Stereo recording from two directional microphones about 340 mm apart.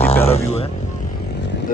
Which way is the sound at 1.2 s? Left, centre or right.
Left.